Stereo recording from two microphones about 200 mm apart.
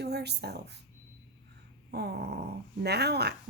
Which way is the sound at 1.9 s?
55° right (ahead or behind).